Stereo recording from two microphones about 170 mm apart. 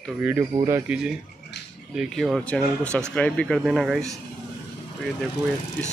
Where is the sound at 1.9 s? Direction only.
Centre (ahead or behind).